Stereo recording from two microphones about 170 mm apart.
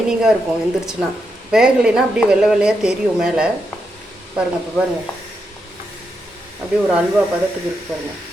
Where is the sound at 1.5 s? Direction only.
5° right (ahead or behind).